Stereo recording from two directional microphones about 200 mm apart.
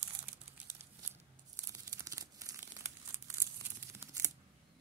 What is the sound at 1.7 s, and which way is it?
Crumpling, 15° right (ahead or behind).